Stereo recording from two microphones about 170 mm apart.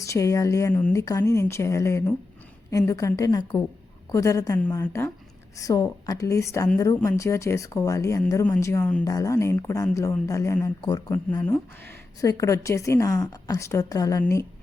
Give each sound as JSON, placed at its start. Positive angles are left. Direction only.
{"t": 0.0, "sound": "a woman's voice", "side_deg": 20}
{"t": 1.0, "sound": "a woman's voice", "side_deg": 20}
{"t": 12.2, "sound": "a woman's voice", "side_deg": 20}